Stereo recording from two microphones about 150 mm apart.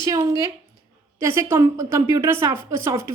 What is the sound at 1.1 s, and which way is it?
A woman's voice, 15° right (ahead or behind).